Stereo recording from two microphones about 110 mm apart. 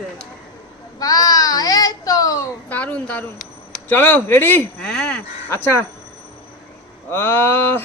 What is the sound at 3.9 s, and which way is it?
Speech, 15° left (ahead or behind).